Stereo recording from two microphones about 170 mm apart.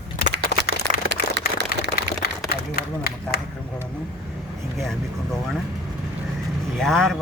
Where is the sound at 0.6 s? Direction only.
85° right.